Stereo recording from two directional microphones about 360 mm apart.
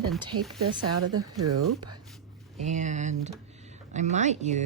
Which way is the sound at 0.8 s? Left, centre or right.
Right.